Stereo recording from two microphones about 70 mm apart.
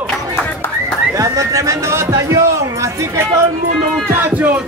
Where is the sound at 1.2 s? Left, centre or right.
Right.